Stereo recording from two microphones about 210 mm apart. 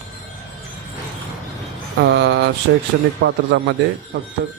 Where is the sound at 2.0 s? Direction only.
55° right (ahead or behind).